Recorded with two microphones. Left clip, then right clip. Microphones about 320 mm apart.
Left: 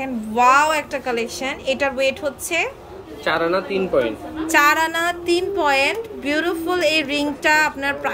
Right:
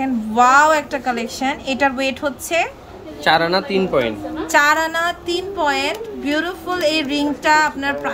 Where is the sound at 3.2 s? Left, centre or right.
Right.